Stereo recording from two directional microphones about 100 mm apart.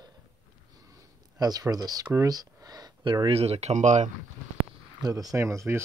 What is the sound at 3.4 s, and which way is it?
Speech, 90° right.